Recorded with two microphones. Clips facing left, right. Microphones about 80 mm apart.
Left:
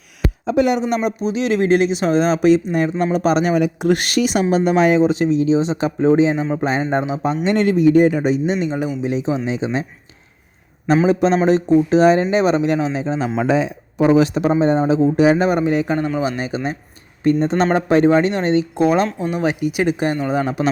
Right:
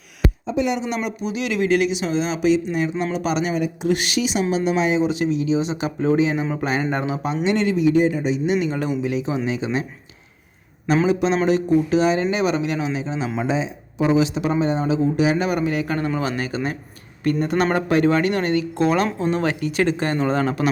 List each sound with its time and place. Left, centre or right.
0.4 s speech: left
1.0 s speech: left
3.5 s speech: left
5.0 s a man's voice: left
7.4 s speech: left
9.0 s a man's voice: left
11.1 s speech: left
13.4 s speech: left
14.6 s a man's voice: left; by 20.7 s centre